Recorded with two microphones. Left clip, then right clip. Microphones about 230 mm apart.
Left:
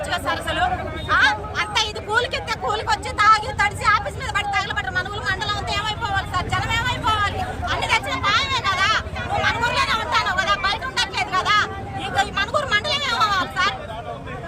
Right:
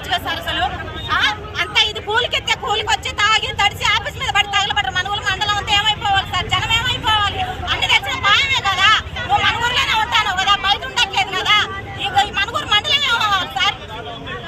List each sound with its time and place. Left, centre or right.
0.1 s speech: centre
1.1 s a sound: centre
4.3 s vehicle: centre